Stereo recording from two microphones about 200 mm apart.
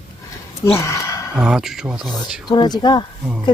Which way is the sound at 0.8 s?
15° left (ahead or behind).